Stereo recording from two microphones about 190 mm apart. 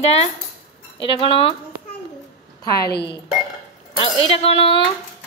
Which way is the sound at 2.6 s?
20° left (ahead or behind).